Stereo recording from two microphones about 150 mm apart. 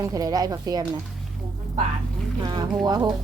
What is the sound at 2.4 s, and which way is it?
Speech, 25° right (ahead or behind).